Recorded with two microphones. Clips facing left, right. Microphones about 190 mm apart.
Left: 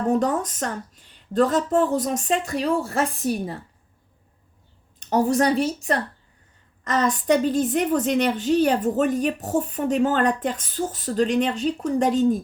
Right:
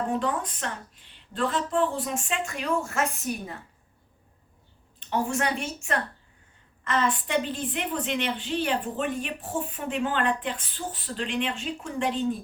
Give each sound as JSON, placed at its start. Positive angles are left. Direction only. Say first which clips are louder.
{"t": 0.1, "sound": "speech", "louder": "left 6 dB", "side_deg": 40}
{"t": 4.9, "sound": "a woman's voice", "louder": "left 8 dB", "side_deg": 40}